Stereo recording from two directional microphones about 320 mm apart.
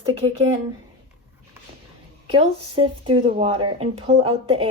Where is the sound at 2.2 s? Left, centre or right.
Centre.